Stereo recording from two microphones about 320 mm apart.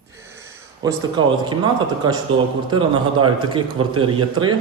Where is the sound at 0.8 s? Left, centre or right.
Centre.